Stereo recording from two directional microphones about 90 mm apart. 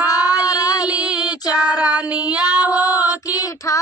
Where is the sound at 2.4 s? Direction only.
45° left (ahead or behind).